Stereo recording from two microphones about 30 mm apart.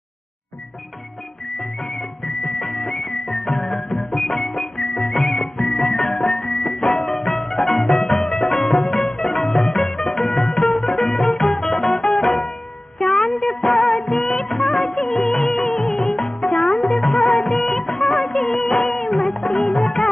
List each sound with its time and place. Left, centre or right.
1.6 s music: centre
5.6 s music: centre
15.6 s music: left
17.2 s music of bollywood: centre
19.4 s music: left